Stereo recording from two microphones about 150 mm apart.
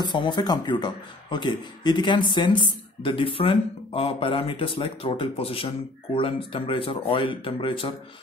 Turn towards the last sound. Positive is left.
turn(degrees=35)  # may be behind; listen again after turning